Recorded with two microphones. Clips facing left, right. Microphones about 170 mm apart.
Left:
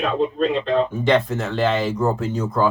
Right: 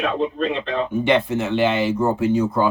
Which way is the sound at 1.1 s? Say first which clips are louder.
Even; 10° right (ahead or behind).